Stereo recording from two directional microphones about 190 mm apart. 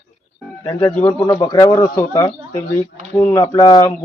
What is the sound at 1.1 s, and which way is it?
A man's voice, 20° left (ahead or behind).